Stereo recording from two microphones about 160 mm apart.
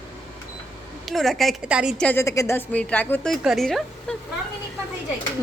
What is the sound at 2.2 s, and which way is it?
A woman's voice, 20° left (ahead or behind).